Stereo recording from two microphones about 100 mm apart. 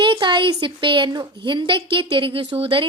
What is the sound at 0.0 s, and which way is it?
A woman's voice, 55° right (ahead or behind).